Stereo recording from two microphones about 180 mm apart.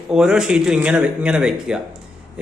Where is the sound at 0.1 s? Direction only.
5° right (ahead or behind).